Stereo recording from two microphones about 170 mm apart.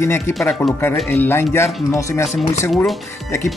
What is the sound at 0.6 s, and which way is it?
Speech, 5° left (ahead or behind).